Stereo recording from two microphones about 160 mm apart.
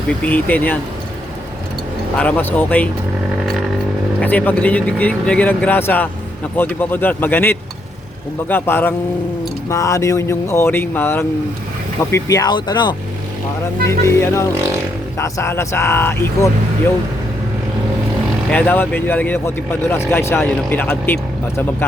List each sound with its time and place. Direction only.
0.3 s speech: 10° left (ahead or behind)
2.1 s speech: 10° left (ahead or behind)
4.2 s speech: 10° left (ahead or behind); by 13.0 s 30° left (ahead or behind)
13.8 s speech: 15° left (ahead or behind)
18.5 s speech: 10° left (ahead or behind)